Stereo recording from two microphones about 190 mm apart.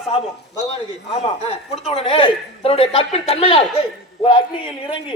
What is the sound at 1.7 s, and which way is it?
A man's voice, 30° left (ahead or behind).